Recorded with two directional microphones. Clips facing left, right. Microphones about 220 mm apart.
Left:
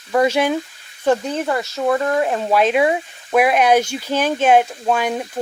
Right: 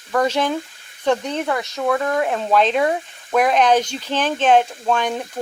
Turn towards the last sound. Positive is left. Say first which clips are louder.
# left 1 dB
turn(degrees=10)  # may be behind; listen again after turning